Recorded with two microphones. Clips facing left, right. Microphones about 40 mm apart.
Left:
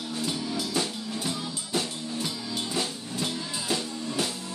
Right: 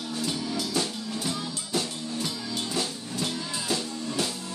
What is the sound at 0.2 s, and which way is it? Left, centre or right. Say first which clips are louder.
Music: even; centre.